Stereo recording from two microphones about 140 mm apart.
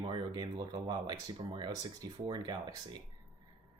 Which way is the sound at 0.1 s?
30° right (ahead or behind).